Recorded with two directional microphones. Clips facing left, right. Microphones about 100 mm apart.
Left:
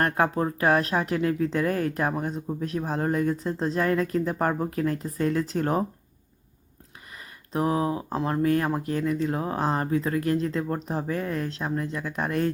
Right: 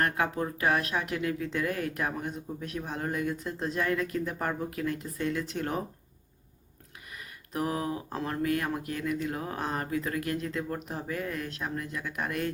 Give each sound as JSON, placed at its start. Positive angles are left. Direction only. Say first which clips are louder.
{"t": 0.0, "sound": "speech", "louder": "left 5 dB", "side_deg": 35}
{"t": 7.1, "sound": "speech", "louder": "left 5 dB", "side_deg": 30}